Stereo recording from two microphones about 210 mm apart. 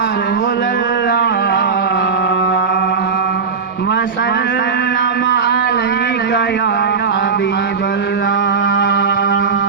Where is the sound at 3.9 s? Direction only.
55° left (ahead or behind).